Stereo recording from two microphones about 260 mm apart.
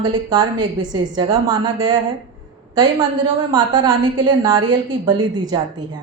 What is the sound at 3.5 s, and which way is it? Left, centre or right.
A woman's voice, centre.